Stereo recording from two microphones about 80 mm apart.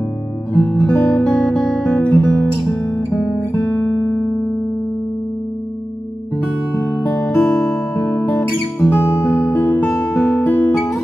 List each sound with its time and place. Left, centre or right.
0.5 s music: left
1.2 s music: centre
1.9 s music: centre
2.1 s guitar: left
7.2 s music: left